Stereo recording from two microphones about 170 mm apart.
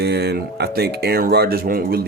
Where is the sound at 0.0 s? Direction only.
75° right (ahead or behind).